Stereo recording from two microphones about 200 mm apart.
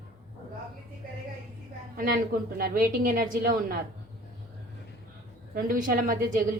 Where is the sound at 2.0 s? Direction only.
45° right (ahead or behind).